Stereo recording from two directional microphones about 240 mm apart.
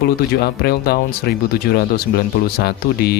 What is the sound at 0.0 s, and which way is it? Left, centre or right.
Speech, left.